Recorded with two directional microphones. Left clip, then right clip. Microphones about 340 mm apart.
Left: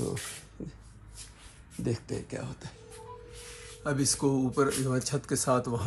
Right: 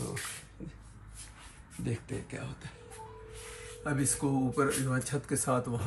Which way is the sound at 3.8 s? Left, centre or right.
Centre.